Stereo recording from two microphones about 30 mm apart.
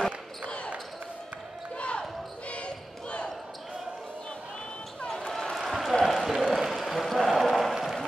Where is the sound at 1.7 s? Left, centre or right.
Left.